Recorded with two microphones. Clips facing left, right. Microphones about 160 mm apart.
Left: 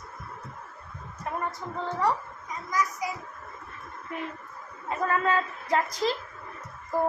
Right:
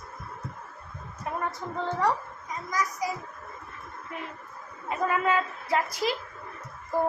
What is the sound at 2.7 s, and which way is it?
Speech, 35° right (ahead or behind).